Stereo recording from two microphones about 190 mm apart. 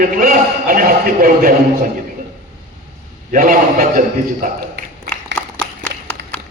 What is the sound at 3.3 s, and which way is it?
A man's voice, 45° right (ahead or behind).